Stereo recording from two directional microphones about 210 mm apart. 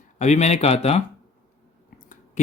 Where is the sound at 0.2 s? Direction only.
35° left (ahead or behind).